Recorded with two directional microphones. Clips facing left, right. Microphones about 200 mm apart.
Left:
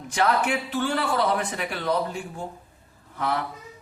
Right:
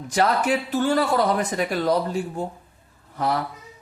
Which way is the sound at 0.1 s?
40° right (ahead or behind).